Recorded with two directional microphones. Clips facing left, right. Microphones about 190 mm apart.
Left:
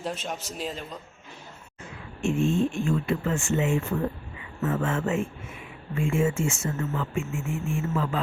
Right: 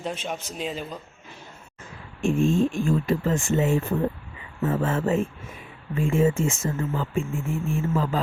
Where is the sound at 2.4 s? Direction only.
90° right.